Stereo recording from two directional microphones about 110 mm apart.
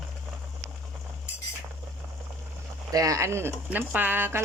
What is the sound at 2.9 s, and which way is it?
Speech, 35° right (ahead or behind).